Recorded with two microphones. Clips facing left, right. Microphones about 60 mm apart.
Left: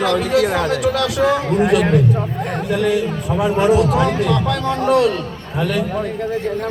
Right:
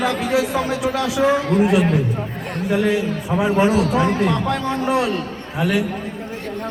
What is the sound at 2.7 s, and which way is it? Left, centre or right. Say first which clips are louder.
A man's voice: even; centre.